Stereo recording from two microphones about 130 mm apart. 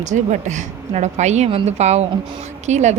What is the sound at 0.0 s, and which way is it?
A woman's voice, 70° right (ahead or behind).